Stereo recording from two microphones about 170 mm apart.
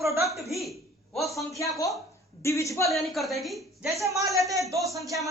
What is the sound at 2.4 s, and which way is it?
Speech, 15° left (ahead or behind).